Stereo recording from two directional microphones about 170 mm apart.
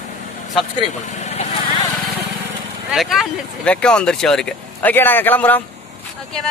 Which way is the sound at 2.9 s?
5° left (ahead or behind).